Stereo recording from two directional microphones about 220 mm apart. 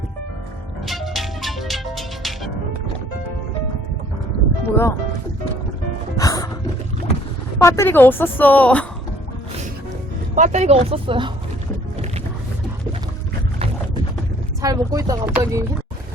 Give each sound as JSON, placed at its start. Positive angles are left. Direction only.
{"t": 0.9, "sound": "music", "side_deg": 0}
{"t": 4.7, "sound": "a woman's voice", "side_deg": 10}
{"t": 6.1, "sound": "music", "side_deg": 15}
{"t": 7.6, "sound": "a woman's voice", "side_deg": 10}
{"t": 10.3, "sound": "speech", "side_deg": -35}
{"t": 14.6, "sound": "speech", "side_deg": -15}